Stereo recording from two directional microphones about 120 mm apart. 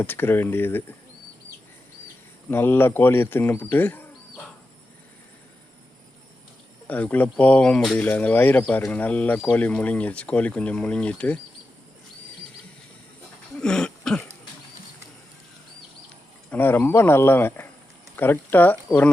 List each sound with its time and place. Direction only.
0.0 s speech: 20° left (ahead or behind)
2.5 s speech: 15° left (ahead or behind)
6.8 s speech: 15° left (ahead or behind)
13.6 s cough: 5° left (ahead or behind)
16.5 s speech: 15° left (ahead or behind)